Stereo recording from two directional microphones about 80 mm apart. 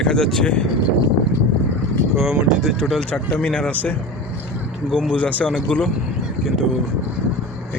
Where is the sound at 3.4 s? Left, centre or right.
Centre.